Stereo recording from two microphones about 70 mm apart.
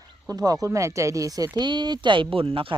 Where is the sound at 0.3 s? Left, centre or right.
Right.